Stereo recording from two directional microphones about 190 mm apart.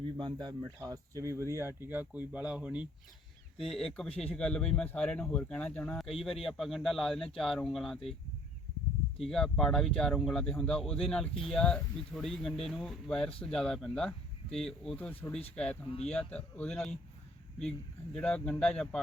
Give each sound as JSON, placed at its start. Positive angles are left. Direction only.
{"t": 0.0, "sound": "speech", "side_deg": -25}
{"t": 9.2, "sound": "speech", "side_deg": 0}
{"t": 15.9, "sound": "speech", "side_deg": 35}
{"t": 16.1, "sound": "speech", "side_deg": 5}